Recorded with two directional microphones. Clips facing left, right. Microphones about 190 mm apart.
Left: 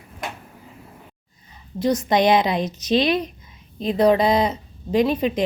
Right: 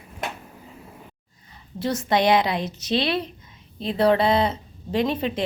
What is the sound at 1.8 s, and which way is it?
Speech, 15° left (ahead or behind).